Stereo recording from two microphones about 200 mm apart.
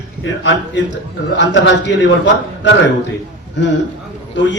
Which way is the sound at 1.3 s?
65° left (ahead or behind).